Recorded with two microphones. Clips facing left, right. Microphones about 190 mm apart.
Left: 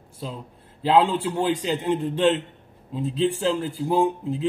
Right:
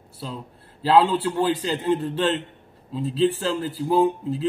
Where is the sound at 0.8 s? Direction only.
15° left (ahead or behind).